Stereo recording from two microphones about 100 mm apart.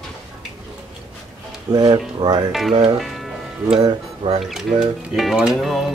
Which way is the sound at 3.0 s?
Centre (ahead or behind).